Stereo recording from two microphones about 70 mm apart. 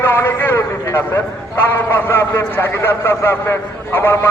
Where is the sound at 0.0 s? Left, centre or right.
Left.